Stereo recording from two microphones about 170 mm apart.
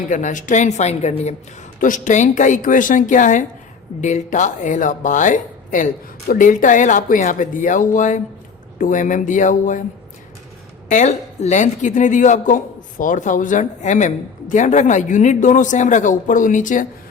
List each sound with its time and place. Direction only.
0.1 s speech: 50° left (ahead or behind)
10.8 s speech: 45° left (ahead or behind)